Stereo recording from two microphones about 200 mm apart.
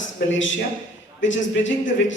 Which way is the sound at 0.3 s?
70° left (ahead or behind).